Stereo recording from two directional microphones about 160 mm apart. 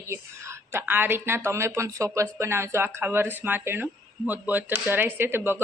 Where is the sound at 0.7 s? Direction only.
15° right (ahead or behind).